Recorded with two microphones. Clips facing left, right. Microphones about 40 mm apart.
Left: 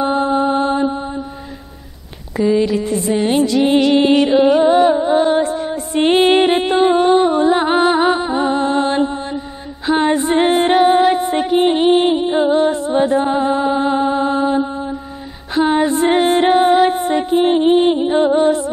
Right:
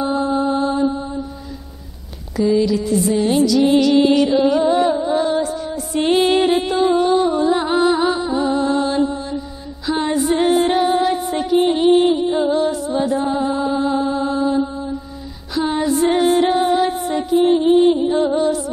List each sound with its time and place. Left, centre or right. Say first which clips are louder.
0.0 s mantra: left 3 dB; left
2.5 s music: right 1 dB; left
15.7 s music: left 1 dB; left